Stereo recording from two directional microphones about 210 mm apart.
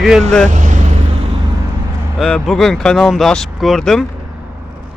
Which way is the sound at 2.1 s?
Centre (ahead or behind).